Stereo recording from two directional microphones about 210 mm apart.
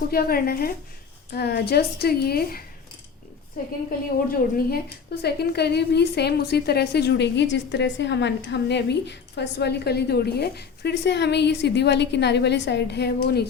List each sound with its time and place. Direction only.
0.1 s a woman's voice: 45° left (ahead or behind)
4.3 s a woman's voice: 45° left (ahead or behind)